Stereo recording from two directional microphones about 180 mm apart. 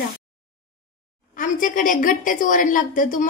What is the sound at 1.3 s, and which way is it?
A woman's voice, 45° left (ahead or behind).